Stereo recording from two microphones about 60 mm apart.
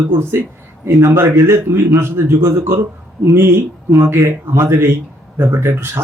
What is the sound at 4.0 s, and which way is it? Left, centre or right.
A man's voice, right.